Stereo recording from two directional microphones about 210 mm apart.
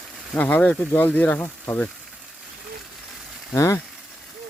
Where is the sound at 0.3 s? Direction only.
10° left (ahead or behind).